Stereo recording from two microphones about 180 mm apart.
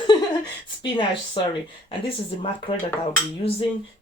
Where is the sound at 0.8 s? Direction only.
25° left (ahead or behind).